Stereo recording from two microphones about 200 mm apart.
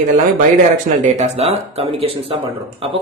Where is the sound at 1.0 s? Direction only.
35° right (ahead or behind).